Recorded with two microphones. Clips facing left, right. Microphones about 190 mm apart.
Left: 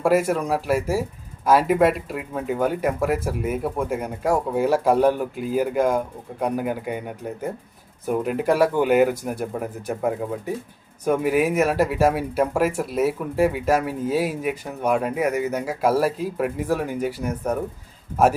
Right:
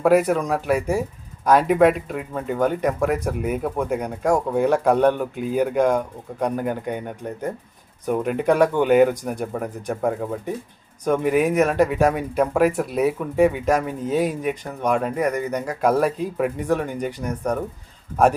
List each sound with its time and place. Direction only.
0.0 s speech: centre (ahead or behind)